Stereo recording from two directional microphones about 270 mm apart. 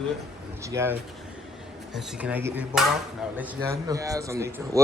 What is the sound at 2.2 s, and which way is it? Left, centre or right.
A man's voice, centre.